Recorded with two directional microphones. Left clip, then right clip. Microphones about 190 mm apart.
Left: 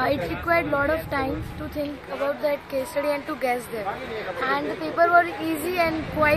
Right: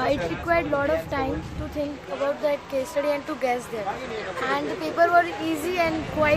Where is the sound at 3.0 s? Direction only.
Centre (ahead or behind).